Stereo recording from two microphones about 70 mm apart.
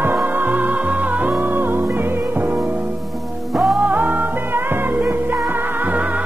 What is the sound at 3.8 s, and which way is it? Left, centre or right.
Music, right.